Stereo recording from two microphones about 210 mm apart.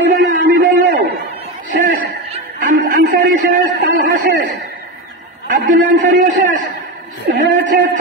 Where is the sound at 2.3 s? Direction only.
40° right (ahead or behind).